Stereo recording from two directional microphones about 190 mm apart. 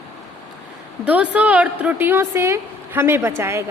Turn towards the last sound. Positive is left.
turn(degrees=-15)  # may be behind; listen again after turning